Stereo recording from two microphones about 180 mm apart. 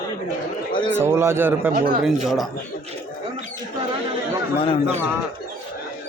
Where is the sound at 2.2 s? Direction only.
Centre (ahead or behind).